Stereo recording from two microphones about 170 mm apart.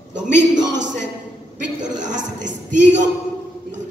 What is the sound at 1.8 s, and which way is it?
Speech, 45° right (ahead or behind).